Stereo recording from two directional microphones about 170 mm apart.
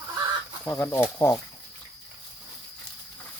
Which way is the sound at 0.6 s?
10° left (ahead or behind).